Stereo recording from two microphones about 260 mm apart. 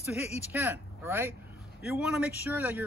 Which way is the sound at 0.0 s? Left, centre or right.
Centre.